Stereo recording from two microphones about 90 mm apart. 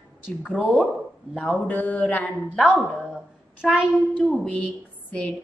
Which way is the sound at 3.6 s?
5° right (ahead or behind).